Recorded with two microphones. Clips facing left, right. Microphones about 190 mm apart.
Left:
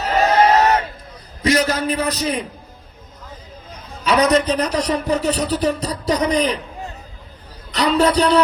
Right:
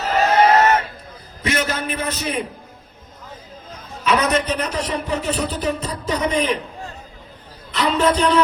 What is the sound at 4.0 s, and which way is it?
A man's voice, 35° left (ahead or behind).